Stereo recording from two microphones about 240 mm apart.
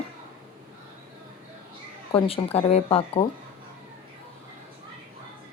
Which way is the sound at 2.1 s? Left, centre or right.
Left.